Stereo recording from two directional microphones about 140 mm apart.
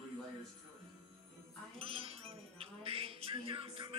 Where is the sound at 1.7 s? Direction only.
40° right (ahead or behind).